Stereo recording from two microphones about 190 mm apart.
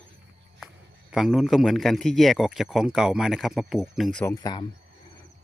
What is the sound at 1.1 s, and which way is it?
Speech, centre (ahead or behind).